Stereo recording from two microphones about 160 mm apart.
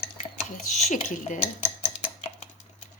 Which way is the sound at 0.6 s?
50° left (ahead or behind).